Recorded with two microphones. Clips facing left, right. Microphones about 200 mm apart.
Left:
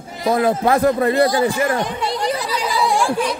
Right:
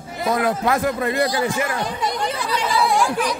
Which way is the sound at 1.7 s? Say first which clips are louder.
Left 3 dB; 20° left (ahead or behind).